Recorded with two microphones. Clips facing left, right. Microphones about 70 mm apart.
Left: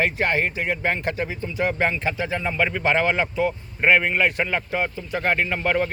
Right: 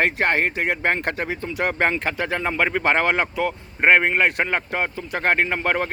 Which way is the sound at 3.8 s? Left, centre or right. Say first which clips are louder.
Right 2 dB; right.